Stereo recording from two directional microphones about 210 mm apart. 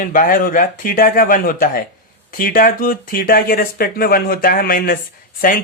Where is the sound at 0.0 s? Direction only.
40° left (ahead or behind).